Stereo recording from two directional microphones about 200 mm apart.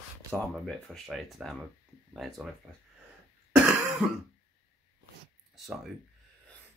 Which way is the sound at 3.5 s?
5° right (ahead or behind).